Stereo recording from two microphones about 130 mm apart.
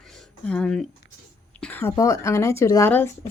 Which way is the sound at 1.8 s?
25° left (ahead or behind).